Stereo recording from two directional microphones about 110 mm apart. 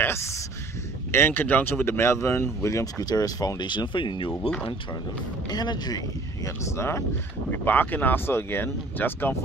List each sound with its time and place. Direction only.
0.0 s a sound: 25° left (ahead or behind)
1.1 s speech: 20° left (ahead or behind); by 4.3 s 50° left (ahead or behind)
4.4 s speech: 10° left (ahead or behind)
5.5 s speech: 40° left (ahead or behind); by 9.3 s 20° left (ahead or behind)